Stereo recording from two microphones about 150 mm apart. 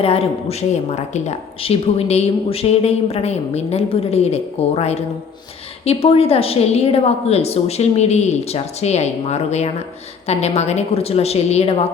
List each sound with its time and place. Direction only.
0.0 s speech: 40° left (ahead or behind)